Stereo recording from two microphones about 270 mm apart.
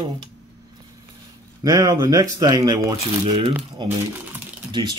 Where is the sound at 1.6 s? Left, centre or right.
Centre.